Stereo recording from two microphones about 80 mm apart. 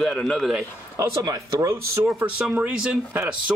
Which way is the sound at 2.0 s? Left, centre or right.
Centre.